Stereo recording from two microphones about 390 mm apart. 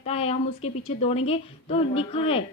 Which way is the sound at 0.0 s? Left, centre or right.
Centre.